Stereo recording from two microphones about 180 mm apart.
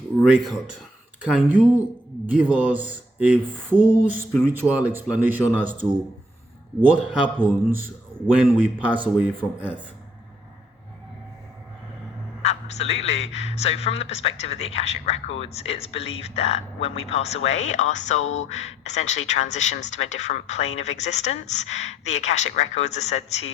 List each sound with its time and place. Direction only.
0.2 s speech: 5° right (ahead or behind)
12.4 s speech: 35° left (ahead or behind)